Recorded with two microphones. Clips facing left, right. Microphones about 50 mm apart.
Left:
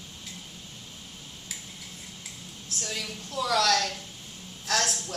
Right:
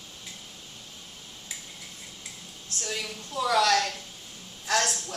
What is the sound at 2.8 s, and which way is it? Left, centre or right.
A woman's voice, centre.